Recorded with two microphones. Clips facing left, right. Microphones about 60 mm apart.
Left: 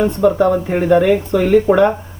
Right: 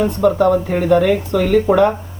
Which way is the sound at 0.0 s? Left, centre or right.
Centre.